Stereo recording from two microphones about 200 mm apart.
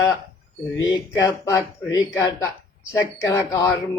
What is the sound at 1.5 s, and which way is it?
Mantra, 15° left (ahead or behind).